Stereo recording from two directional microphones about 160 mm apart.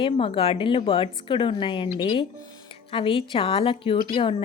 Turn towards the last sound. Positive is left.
turn(degrees=35)  # may be behind; listen again after turning